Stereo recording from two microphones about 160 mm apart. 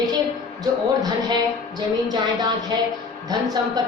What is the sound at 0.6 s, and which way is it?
Speech, 25° right (ahead or behind).